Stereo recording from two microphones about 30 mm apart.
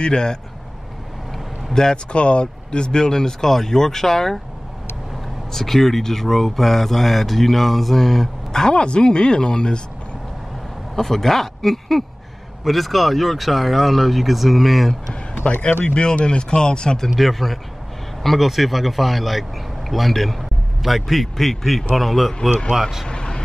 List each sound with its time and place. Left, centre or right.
0.0 s speech: left
1.7 s speech: left
2.1 s speech: left; by 4.4 s centre
5.5 s speech: centre
8.5 s a sound: centre
8.7 s speech: left
11.0 s speech: centre
15.4 s speech: left
17.1 s a man's voice: centre
22.7 s speech: centre
23.0 s vehicle: left